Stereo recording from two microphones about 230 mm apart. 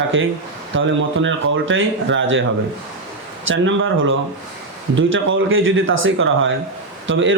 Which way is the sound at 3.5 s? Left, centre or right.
Right.